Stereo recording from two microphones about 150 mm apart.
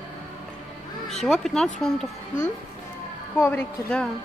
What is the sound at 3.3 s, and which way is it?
Speech, 15° left (ahead or behind).